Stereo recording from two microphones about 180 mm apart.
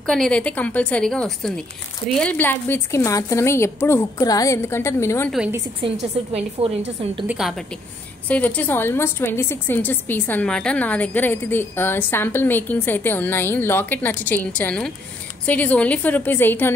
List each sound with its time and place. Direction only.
0.0 s a woman's voice: 5° left (ahead or behind)
5.8 s a woman's voice: 35° right (ahead or behind)
7.2 s a woman's voice: centre (ahead or behind)